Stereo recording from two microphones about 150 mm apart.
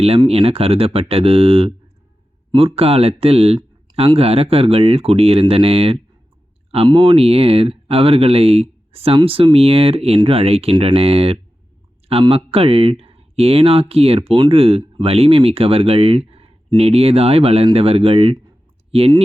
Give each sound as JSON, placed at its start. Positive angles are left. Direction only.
{"t": 0.3, "sound": "speech", "side_deg": -40}